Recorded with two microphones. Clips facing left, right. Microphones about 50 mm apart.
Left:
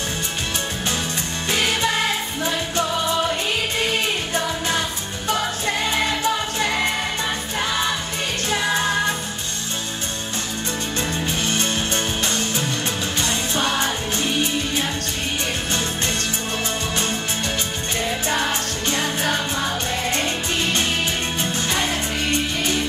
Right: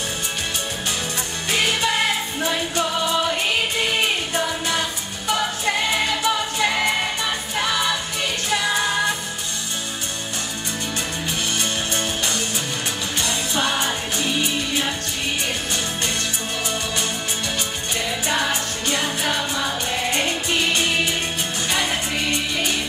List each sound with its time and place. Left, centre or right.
6.2 s music: right
13.6 s music: right
19.3 s music: left
20.1 s music: right